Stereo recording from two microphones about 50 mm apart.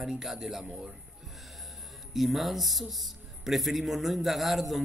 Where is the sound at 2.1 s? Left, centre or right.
Centre.